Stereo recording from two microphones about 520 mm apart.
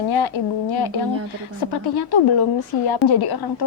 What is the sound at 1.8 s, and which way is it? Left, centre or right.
Speech, left.